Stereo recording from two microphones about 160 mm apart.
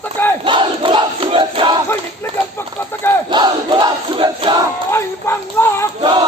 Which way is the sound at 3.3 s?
30° right (ahead or behind).